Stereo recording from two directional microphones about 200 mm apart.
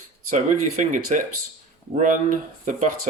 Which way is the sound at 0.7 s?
40° right (ahead or behind).